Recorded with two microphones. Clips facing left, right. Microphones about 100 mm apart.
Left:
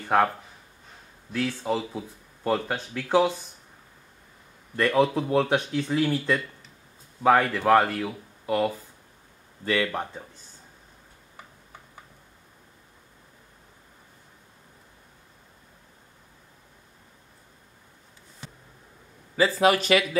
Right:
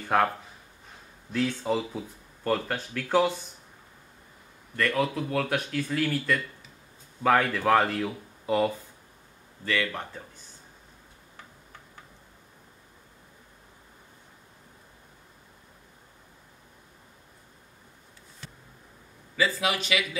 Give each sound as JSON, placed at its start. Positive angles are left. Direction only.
{"t": 0.1, "sound": "speech", "side_deg": 0}
{"t": 1.3, "sound": "speech", "side_deg": 0}
{"t": 4.7, "sound": "speech", "side_deg": 30}
{"t": 7.2, "sound": "speech", "side_deg": 5}
{"t": 9.7, "sound": "speech", "side_deg": 25}
{"t": 19.3, "sound": "speech", "side_deg": 40}